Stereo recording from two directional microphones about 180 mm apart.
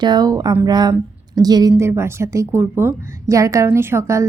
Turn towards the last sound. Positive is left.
turn(degrees=-15)  # may be behind; listen again after turning